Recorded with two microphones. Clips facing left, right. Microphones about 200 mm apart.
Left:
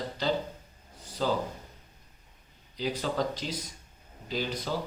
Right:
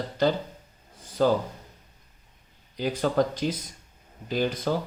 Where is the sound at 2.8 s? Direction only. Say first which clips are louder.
Right 6 dB; 50° right (ahead or behind).